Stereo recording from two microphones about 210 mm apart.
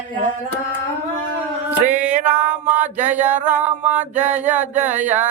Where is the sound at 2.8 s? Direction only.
35° right (ahead or behind).